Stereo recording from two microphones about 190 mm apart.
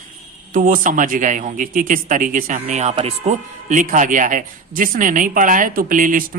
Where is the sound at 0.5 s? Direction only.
45° right (ahead or behind).